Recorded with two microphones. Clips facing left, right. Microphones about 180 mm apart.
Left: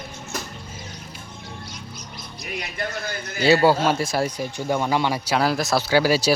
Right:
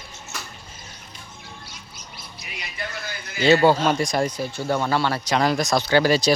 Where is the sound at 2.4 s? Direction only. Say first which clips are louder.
Left 5 dB; 50° left (ahead or behind).